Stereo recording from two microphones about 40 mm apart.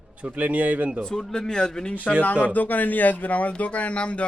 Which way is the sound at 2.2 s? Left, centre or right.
Left.